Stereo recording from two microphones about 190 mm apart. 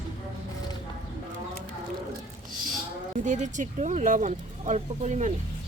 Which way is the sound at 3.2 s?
40° right (ahead or behind).